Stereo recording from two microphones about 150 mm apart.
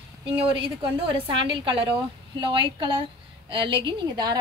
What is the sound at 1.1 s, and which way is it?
A woman's voice, 35° right (ahead or behind).